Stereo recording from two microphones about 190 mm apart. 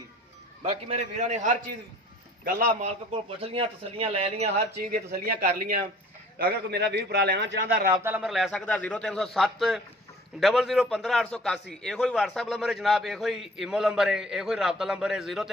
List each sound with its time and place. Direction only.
0.6 s speech: 30° right (ahead or behind)
2.8 s speech: 30° right (ahead or behind)
4.5 s speech: 50° right (ahead or behind)
6.4 s a man's voice: 60° right (ahead or behind)
7.9 s a man's voice: 10° right (ahead or behind)